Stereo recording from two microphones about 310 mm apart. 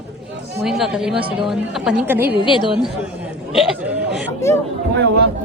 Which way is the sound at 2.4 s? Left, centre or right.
Centre.